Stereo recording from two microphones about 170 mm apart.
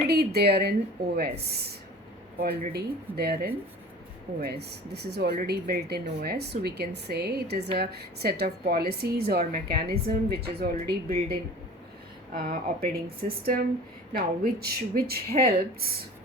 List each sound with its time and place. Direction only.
0.1 s a woman's voice: 70° right (ahead or behind)
14.1 s a woman's voice: 65° right (ahead or behind)